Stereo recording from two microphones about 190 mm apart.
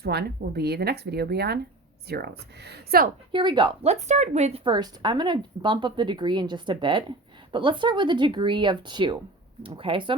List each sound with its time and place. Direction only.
0.0 s speech: 60° right (ahead or behind)
3.3 s speech: 25° right (ahead or behind)
4.1 s speech: 35° right (ahead or behind)